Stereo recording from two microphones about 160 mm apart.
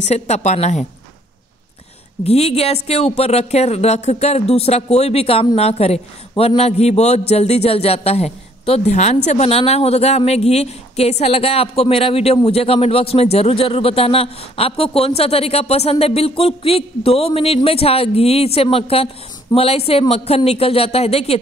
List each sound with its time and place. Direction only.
0.0 s a woman's voice: 45° left (ahead or behind)
2.2 s speech: 40° left (ahead or behind)